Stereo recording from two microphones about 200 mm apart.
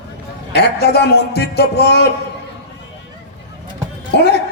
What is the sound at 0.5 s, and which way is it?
Speech, 55° left (ahead or behind).